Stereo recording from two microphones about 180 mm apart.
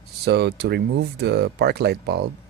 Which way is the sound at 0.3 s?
65° right (ahead or behind).